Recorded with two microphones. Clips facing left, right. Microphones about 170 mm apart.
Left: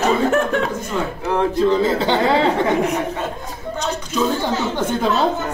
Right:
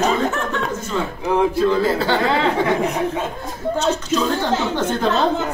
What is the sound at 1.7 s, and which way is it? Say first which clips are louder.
Speech: left 1 dB; 20° left (ahead or behind).